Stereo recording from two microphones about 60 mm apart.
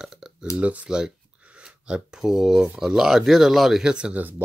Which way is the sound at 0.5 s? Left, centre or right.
Right.